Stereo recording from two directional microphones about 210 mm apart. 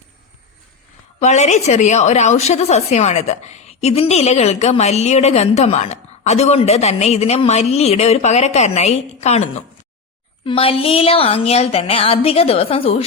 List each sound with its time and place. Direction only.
1.2 s a woman's voice: 35° left (ahead or behind)